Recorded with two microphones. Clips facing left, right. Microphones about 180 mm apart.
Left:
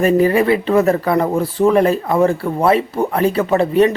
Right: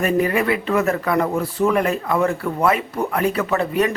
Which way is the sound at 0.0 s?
30° left (ahead or behind).